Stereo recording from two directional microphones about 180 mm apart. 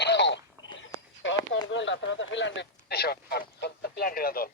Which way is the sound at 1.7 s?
90° left.